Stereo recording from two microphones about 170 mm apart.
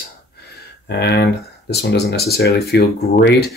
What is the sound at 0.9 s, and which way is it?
Speech, 75° left (ahead or behind).